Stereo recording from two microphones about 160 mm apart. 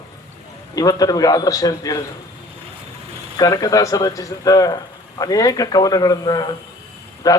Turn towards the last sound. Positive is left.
turn(degrees=20)  # may be behind; listen again after turning